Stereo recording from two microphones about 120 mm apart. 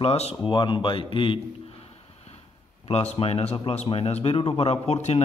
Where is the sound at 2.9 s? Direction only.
60° left (ahead or behind).